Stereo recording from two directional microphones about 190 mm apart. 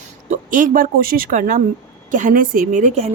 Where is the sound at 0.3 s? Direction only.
45° right (ahead or behind).